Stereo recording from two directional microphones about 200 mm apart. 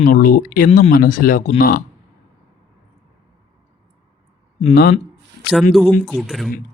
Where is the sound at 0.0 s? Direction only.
45° left (ahead or behind).